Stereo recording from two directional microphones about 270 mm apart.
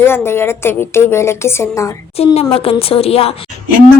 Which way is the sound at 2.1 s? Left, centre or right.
Left.